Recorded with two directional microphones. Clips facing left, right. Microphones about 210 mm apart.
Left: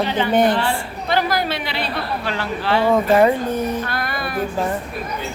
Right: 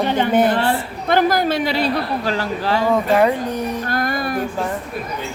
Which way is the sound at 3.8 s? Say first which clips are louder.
Right 4 dB; 45° right (ahead or behind).